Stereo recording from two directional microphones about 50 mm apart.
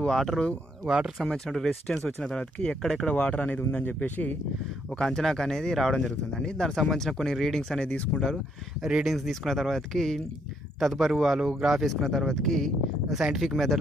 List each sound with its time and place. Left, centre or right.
0.0 s speech: centre
3.1 s speech: left
4.9 s speech: centre
7.8 s speech: centre
9.0 s speech: centre